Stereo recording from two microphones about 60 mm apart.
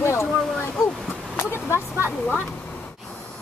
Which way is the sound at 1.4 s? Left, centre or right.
Left.